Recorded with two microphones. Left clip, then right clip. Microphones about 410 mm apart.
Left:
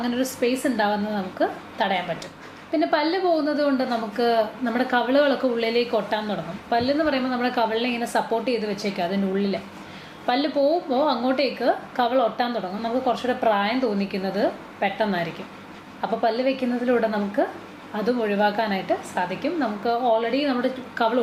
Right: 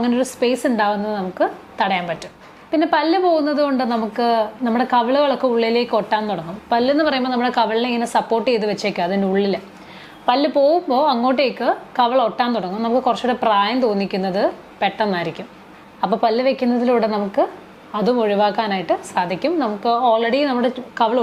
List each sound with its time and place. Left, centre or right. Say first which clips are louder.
0.0 s a woman's voice: right 5 dB; right